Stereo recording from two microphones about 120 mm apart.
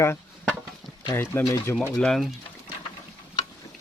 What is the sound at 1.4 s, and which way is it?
Speech, 30° left (ahead or behind).